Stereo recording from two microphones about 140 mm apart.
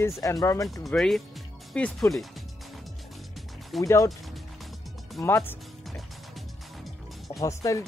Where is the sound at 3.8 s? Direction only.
20° left (ahead or behind).